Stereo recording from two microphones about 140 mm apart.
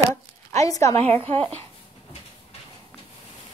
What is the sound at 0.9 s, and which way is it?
Speech, 45° right (ahead or behind).